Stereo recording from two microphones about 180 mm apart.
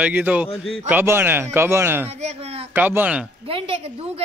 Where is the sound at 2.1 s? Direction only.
35° right (ahead or behind).